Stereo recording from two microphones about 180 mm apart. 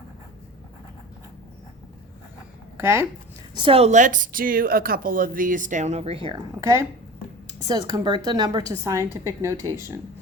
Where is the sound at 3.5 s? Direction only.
25° right (ahead or behind).